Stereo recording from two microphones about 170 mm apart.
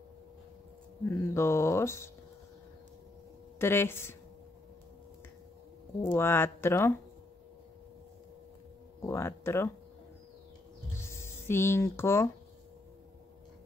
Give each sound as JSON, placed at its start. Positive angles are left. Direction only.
{"t": 1.0, "sound": "speech", "side_deg": 15}
{"t": 3.5, "sound": "speech", "side_deg": 15}
{"t": 6.0, "sound": "speech", "side_deg": 15}
{"t": 9.0, "sound": "speech", "side_deg": 15}
{"t": 11.0, "sound": "a sound", "side_deg": 15}